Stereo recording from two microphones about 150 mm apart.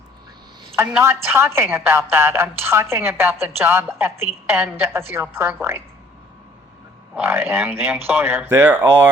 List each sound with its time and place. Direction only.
0.8 s a woman's voice: 15° right (ahead or behind)
7.2 s a woman's voice: 15° right (ahead or behind)